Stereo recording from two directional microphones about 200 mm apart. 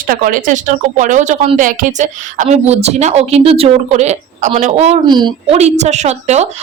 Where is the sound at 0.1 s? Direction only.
45° right (ahead or behind).